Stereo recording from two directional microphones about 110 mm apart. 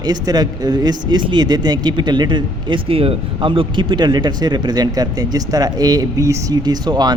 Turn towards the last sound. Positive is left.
turn(degrees=-40)  # may be behind; listen again after turning